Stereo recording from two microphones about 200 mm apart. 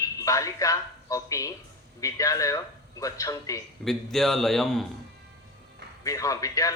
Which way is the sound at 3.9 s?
Centre (ahead or behind).